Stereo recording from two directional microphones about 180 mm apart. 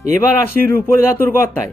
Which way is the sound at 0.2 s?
15° left (ahead or behind).